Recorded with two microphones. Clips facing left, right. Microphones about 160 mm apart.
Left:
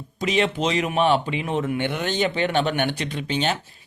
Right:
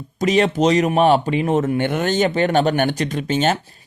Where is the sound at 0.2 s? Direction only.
45° right (ahead or behind).